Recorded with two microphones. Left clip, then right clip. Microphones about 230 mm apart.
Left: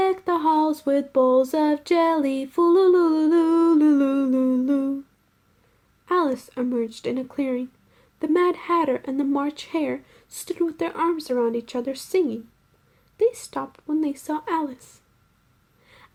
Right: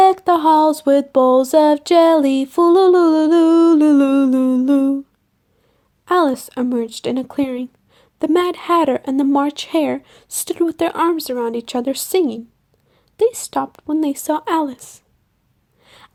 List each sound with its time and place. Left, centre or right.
0.0 s speech: right
6.1 s speech: right
15.8 s a sound: right